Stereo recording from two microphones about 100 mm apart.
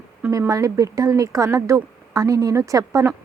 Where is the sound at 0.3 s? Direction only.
35° right (ahead or behind).